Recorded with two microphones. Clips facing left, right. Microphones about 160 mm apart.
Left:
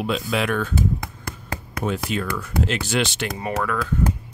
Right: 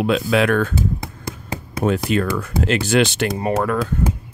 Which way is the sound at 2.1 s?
60° right (ahead or behind).